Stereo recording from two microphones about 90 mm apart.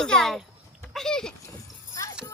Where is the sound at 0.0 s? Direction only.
5° left (ahead or behind).